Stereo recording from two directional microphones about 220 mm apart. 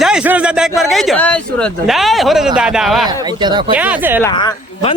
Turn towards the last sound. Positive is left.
turn(degrees=20)  # may be behind; listen again after turning